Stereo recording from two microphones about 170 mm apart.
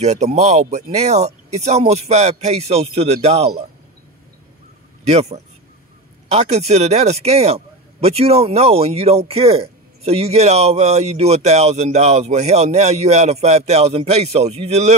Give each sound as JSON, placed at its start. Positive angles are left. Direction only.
{"t": 0.0, "sound": "speech", "side_deg": -40}
{"t": 5.0, "sound": "speech", "side_deg": -40}